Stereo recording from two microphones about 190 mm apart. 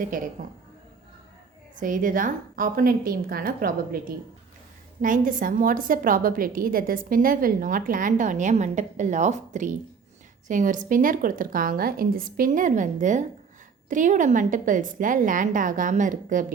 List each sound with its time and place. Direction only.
0.1 s a woman's voice: 45° right (ahead or behind)
1.8 s a woman's voice: 45° right (ahead or behind)